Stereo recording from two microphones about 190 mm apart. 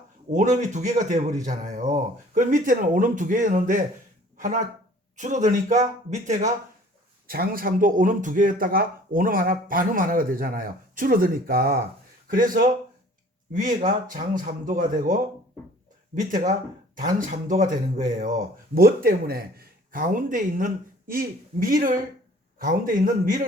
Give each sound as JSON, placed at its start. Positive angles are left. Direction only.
{"t": 0.3, "sound": "a man's voice", "side_deg": -40}
{"t": 7.3, "sound": "speech", "side_deg": -50}